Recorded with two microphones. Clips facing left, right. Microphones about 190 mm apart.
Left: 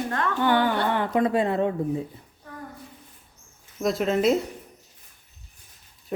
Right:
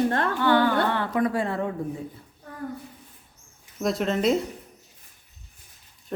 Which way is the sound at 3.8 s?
Centre (ahead or behind).